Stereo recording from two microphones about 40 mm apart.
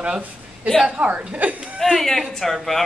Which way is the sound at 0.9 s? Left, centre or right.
Right.